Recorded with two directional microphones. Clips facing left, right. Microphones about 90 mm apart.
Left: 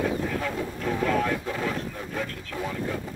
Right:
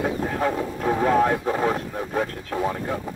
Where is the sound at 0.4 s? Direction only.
45° right (ahead or behind).